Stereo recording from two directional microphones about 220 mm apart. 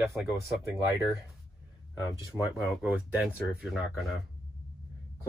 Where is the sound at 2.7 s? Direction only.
5° right (ahead or behind).